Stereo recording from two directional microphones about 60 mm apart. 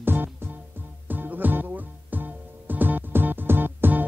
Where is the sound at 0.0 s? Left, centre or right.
Right.